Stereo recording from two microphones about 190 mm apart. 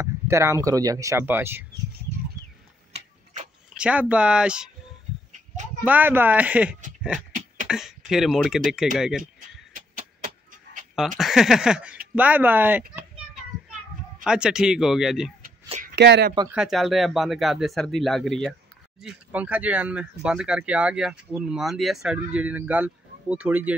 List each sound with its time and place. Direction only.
0.0 s speech: 15° right (ahead or behind)
3.7 s speech: 5° right (ahead or behind)
5.9 s speech: 10° right (ahead or behind)
9.9 s a sound: 45° right (ahead or behind)
11.0 s speech: centre (ahead or behind)
14.2 s speech: 5° right (ahead or behind)
15.8 s speech: 60° right (ahead or behind)
16.4 s speech: 5° right (ahead or behind)